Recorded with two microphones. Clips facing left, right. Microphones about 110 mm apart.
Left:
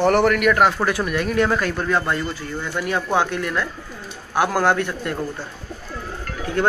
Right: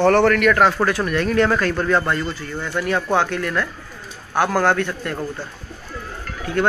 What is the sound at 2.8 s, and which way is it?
Speech, 15° left (ahead or behind).